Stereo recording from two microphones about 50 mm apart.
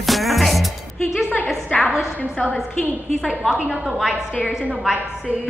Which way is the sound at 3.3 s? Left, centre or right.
Centre.